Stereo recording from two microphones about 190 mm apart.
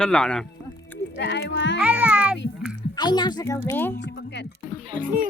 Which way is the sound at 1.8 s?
5° right (ahead or behind).